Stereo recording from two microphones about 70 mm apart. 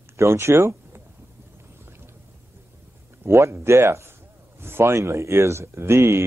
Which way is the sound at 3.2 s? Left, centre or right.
Right.